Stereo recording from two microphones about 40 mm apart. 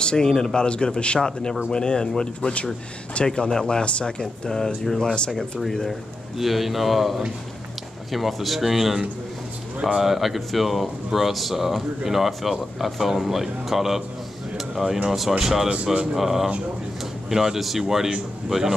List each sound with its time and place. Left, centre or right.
0.0 s speech: centre
1.2 s speech: centre
14.6 s a sound: centre
15.0 s speech: centre
15.7 s speech: right
16.2 s speech: centre